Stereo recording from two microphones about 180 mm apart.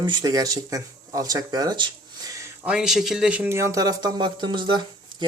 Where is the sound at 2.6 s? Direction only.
5° right (ahead or behind).